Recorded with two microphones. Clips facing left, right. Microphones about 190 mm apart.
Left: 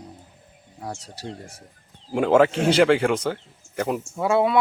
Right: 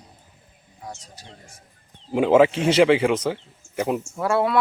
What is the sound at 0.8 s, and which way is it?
Speech, 70° left (ahead or behind).